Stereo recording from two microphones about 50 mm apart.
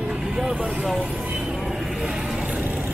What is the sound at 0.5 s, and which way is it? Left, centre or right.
Speech, centre.